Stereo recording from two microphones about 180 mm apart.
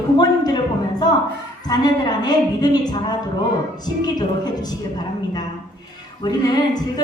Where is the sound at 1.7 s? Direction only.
20° left (ahead or behind).